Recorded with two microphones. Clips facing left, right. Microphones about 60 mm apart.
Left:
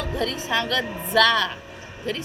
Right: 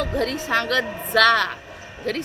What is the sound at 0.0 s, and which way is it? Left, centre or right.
A woman's voice, right.